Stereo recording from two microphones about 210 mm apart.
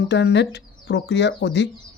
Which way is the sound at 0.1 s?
55° left (ahead or behind).